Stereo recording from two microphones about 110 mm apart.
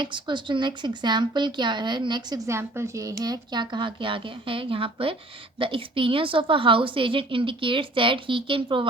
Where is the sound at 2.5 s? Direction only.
25° right (ahead or behind).